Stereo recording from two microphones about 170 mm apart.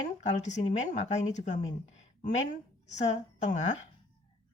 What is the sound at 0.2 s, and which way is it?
Speech, 45° left (ahead or behind).